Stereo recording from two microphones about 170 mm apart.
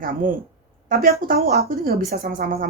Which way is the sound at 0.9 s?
55° right (ahead or behind).